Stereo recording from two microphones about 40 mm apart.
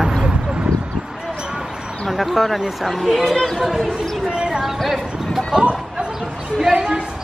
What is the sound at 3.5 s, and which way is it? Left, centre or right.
Speech, centre.